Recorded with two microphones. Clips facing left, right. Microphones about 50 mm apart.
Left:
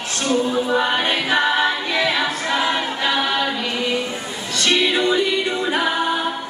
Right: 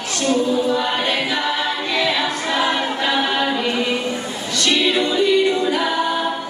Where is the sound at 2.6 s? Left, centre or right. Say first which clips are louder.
Right 3 dB; centre.